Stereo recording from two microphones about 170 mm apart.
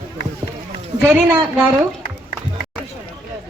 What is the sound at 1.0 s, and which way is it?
Speech, 15° right (ahead or behind).